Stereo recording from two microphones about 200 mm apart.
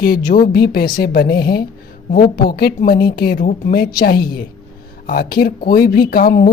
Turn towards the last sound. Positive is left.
turn(degrees=40)  # may be behind; listen again after turning